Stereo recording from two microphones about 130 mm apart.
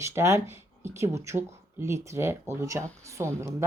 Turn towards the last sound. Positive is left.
turn(degrees=-25)  # may be behind; listen again after turning